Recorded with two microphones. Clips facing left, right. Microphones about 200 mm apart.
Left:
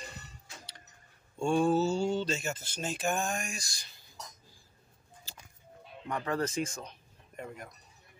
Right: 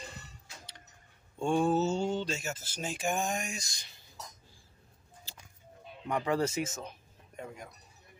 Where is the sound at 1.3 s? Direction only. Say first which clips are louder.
Left 1 dB; 15° right (ahead or behind).